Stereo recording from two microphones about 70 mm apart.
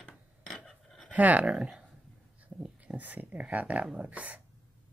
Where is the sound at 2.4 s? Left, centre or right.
Right.